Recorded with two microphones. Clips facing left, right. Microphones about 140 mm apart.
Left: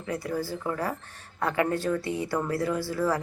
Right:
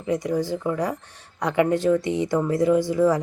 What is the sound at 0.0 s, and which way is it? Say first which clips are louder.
Speech: right 7 dB; 20° right (ahead or behind).